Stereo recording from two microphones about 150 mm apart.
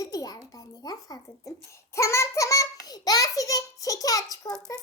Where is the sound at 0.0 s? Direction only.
25° left (ahead or behind).